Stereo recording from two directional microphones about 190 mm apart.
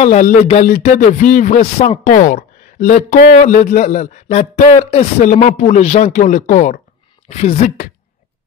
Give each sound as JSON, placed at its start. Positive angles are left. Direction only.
{"t": 0.0, "sound": "speech", "side_deg": 35}
{"t": 2.0, "sound": "speech", "side_deg": 45}